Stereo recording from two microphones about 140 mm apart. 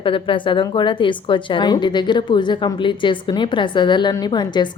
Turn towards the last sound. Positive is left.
turn(degrees=30)  # may be behind; listen again after turning